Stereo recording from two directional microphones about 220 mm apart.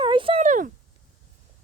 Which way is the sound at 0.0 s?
25° right (ahead or behind).